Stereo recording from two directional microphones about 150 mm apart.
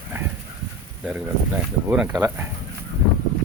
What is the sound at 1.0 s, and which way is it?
Speech, 10° right (ahead or behind).